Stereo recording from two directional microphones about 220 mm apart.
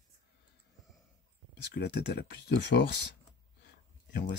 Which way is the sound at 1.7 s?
50° left (ahead or behind).